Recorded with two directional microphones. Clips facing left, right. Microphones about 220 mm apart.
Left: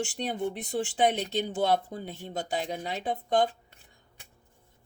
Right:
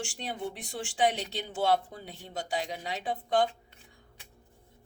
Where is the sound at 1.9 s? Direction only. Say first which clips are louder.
Left 7 dB; 45° left (ahead or behind).